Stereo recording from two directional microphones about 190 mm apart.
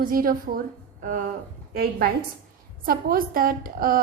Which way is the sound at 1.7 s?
50° right (ahead or behind).